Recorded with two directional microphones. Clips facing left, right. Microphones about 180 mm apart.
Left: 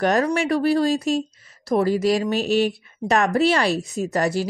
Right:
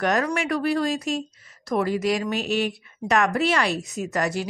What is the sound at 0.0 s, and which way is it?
Speech, 30° left (ahead or behind).